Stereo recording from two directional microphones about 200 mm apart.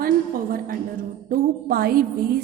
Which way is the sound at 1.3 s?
50° right (ahead or behind).